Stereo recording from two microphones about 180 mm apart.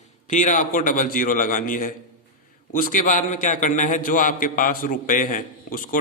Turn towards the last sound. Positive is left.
turn(degrees=50)  # may be behind; listen again after turning